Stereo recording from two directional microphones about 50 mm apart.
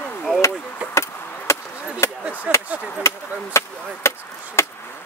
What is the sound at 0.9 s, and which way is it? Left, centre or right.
Chop, left.